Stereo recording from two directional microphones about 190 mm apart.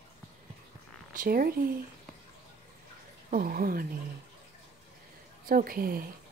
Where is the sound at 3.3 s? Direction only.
50° right (ahead or behind).